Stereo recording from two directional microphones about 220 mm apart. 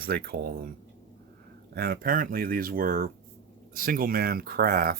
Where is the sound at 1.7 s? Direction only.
45° right (ahead or behind).